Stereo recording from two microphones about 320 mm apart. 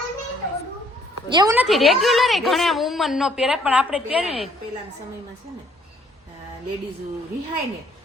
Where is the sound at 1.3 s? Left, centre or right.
Centre.